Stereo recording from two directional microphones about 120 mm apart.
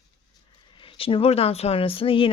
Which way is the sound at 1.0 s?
50° left (ahead or behind).